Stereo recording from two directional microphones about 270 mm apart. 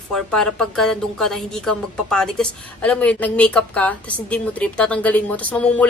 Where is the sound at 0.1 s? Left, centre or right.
Centre.